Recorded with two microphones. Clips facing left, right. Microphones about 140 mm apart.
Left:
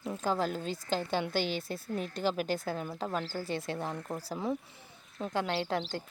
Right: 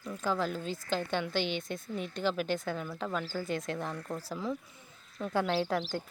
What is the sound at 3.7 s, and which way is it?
Speech, 25° left (ahead or behind).